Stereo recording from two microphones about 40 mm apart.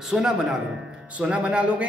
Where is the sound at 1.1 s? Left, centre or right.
Right.